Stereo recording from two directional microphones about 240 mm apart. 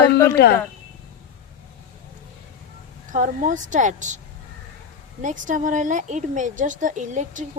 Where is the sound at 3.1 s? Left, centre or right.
Right.